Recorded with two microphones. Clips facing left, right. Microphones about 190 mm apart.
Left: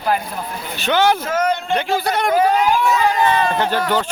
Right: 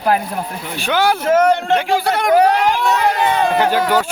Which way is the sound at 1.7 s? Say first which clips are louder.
Right 3 dB; 10° right (ahead or behind).